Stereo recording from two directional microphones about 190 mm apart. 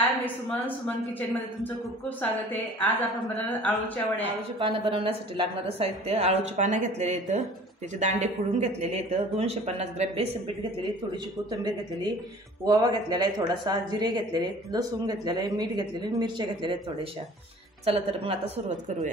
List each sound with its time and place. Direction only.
0.0 s speech: 10° left (ahead or behind)
3.6 s speech: 10° left (ahead or behind)
4.6 s a woman's voice: 25° right (ahead or behind)
12.6 s a woman's voice: 20° right (ahead or behind)
17.8 s a woman's voice: 30° right (ahead or behind)